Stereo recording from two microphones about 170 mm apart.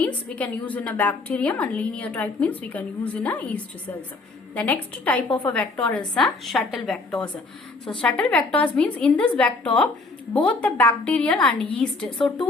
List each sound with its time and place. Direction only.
0.0 s a woman's voice: 5° left (ahead or behind)